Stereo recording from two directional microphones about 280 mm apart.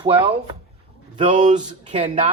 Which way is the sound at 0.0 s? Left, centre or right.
Centre.